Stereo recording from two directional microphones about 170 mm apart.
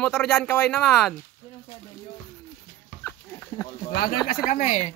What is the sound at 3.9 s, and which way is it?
Speech, 65° left (ahead or behind).